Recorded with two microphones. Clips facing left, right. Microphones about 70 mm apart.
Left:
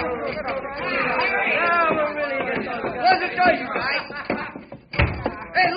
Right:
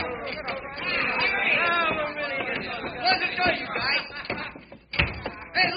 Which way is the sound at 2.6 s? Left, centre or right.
Centre.